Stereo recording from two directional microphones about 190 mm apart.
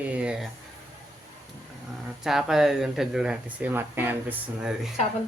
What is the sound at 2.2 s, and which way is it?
Speech, centre (ahead or behind).